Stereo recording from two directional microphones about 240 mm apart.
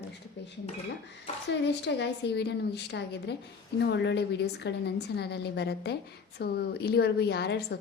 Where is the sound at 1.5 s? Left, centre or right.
Left.